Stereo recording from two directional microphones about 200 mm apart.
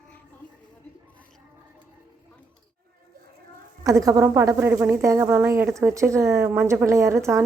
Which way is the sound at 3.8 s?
15° right (ahead or behind).